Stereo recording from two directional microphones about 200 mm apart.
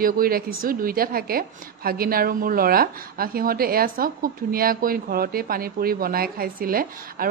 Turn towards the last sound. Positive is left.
turn(degrees=-45)  # may be behind; listen again after turning